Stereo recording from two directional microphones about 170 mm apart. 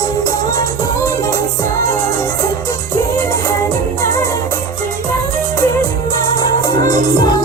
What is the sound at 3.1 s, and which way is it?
Music, 20° left (ahead or behind).